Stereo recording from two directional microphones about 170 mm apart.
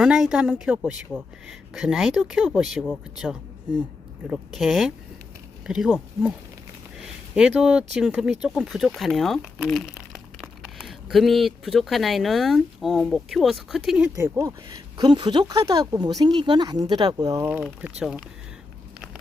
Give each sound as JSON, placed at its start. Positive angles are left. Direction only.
{"t": 0.0, "sound": "speech", "side_deg": -5}
{"t": 7.0, "sound": "a sound", "side_deg": -5}
{"t": 7.9, "sound": "speech", "side_deg": -5}
{"t": 17.5, "sound": "speech", "side_deg": -5}